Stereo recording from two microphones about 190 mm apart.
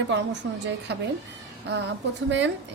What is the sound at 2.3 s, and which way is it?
Speech, 70° right (ahead or behind).